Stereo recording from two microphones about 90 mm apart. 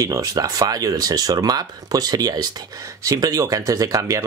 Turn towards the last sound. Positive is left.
turn(degrees=-35)  # may be behind; listen again after turning